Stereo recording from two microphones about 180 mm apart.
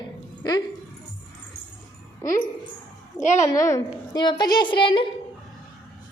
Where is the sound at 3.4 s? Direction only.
15° left (ahead or behind).